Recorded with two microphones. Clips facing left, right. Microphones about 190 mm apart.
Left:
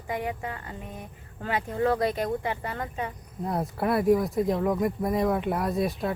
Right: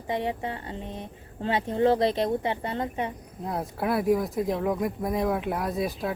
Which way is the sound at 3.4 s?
Centre (ahead or behind).